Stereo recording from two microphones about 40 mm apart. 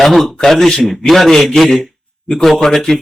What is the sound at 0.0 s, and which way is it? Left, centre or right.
Speech, centre.